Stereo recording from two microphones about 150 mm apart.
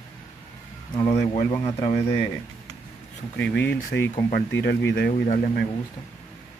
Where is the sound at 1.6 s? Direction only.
45° left (ahead or behind).